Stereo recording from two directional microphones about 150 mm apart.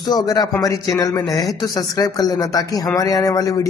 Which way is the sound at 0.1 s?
25° left (ahead or behind).